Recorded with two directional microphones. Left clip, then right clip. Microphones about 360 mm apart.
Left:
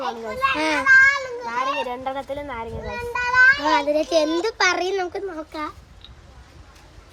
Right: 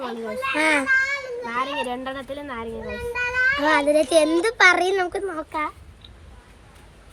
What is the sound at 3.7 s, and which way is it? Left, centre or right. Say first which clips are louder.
A child's voice: right 1 dB; centre.